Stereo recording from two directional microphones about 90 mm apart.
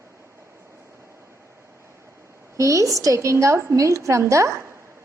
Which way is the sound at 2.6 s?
35° right (ahead or behind).